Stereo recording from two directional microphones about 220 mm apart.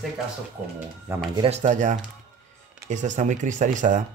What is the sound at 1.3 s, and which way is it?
Speech, 30° right (ahead or behind).